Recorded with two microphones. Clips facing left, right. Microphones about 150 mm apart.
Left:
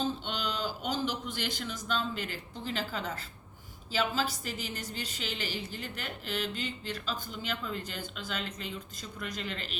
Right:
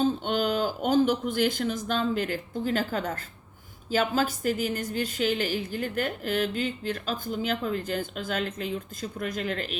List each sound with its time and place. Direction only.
0.0 s a woman's voice: 50° right (ahead or behind)